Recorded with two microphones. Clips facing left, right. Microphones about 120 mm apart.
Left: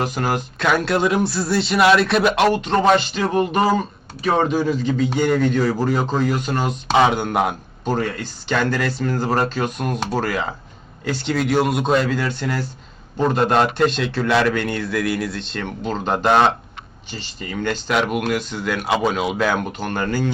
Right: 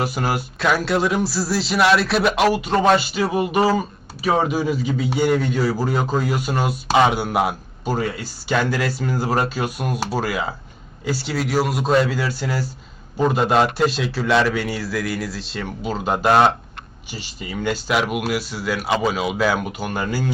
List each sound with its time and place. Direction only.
0.0 s a man's voice: 5° right (ahead or behind)